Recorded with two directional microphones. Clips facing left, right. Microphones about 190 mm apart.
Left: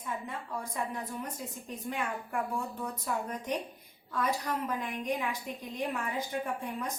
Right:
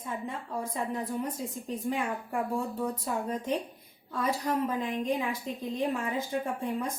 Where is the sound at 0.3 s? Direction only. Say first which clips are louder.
Right 3 dB; 30° right (ahead or behind).